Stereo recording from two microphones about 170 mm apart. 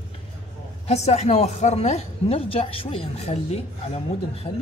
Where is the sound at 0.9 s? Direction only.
40° left (ahead or behind).